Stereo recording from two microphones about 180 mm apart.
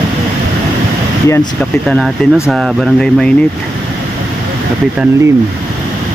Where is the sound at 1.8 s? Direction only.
Centre (ahead or behind).